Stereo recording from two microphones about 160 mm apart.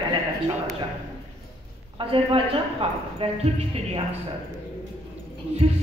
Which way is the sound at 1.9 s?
35° right (ahead or behind).